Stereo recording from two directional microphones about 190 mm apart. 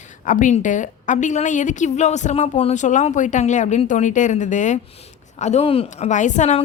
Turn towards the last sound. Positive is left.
turn(degrees=40)  # may be behind; listen again after turning